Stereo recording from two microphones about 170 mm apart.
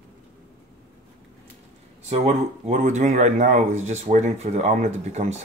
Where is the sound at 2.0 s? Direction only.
40° right (ahead or behind).